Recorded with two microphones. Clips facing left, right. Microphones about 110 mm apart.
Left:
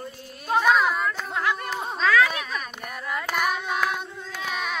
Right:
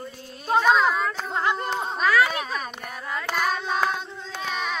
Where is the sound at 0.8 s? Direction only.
25° right (ahead or behind).